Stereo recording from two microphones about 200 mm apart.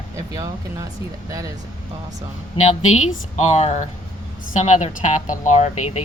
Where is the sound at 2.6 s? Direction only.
35° left (ahead or behind).